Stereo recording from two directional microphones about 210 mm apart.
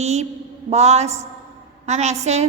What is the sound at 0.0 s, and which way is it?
A woman's voice, 30° right (ahead or behind).